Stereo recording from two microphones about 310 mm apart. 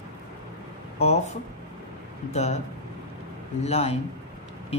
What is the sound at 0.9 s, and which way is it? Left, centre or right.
Speech, centre.